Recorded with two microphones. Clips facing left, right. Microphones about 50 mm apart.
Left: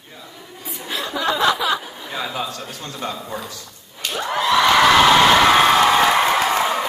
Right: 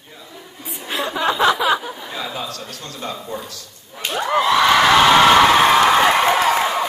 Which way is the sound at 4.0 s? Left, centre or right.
Right.